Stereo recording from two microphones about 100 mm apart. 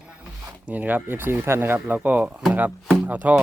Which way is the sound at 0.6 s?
15° right (ahead or behind).